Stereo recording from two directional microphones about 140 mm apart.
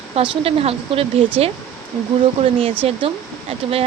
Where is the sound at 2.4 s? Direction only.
45° right (ahead or behind).